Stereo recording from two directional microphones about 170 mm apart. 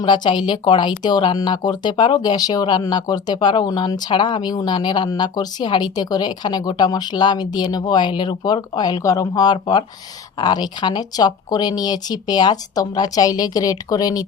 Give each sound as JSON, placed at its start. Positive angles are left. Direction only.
{"t": 0.0, "sound": "speech", "side_deg": 25}